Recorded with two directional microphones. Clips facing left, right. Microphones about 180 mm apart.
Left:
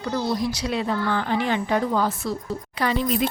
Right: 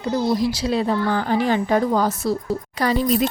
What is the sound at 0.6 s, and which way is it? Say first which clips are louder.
A woman's voice: right 4 dB; 35° right (ahead or behind).